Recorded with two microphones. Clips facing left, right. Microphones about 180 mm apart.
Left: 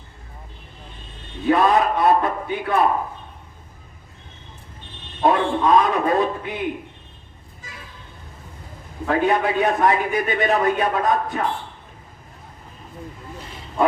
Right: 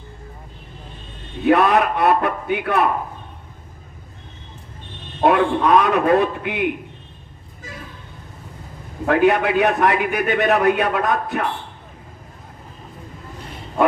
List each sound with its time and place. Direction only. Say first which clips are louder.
1.5 s a man's voice: right 2 dB; 65° right (ahead or behind)
5.2 s a man's voice: right 2 dB; 60° right (ahead or behind)
9.0 s a man's voice: right 3 dB; 65° right (ahead or behind)